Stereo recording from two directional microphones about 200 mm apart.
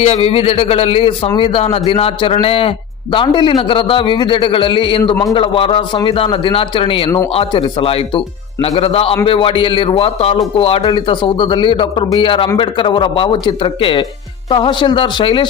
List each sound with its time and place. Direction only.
0.0 s a man's voice: 30° left (ahead or behind)